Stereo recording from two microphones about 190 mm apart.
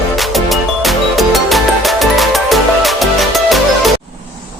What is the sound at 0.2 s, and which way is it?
Music, centre (ahead or behind).